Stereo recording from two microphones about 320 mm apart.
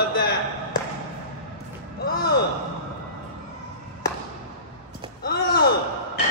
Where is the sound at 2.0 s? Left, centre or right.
Left.